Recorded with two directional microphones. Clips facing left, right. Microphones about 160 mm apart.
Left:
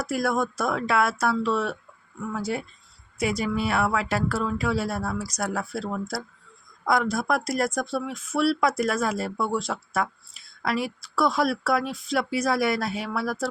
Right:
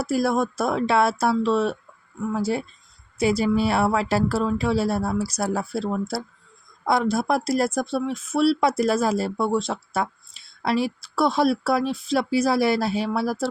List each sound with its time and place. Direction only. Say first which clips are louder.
0.0 s speech: right 3 dB; 30° right (ahead or behind)